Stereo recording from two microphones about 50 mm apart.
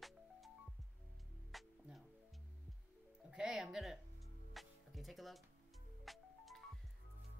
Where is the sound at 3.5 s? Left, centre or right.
Centre.